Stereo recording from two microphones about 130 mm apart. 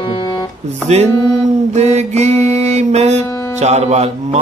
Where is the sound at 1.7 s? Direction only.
60° right (ahead or behind).